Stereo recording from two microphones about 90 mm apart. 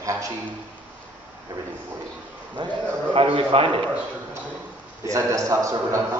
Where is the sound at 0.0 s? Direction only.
35° right (ahead or behind).